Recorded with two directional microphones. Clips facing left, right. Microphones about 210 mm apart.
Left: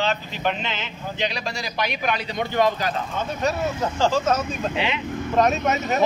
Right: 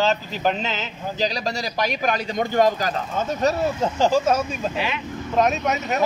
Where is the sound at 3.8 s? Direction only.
15° right (ahead or behind).